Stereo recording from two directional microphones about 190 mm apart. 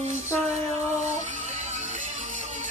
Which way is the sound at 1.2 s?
40° right (ahead or behind).